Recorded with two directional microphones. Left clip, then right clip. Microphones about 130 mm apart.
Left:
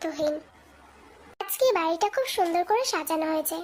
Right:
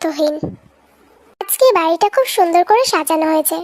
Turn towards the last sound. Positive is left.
turn(degrees=-50)  # may be behind; listen again after turning